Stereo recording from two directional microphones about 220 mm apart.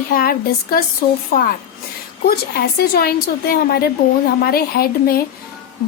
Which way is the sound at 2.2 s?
45° left (ahead or behind).